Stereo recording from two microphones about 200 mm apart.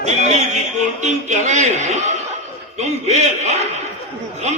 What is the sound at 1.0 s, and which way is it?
A man's voice, 35° right (ahead or behind).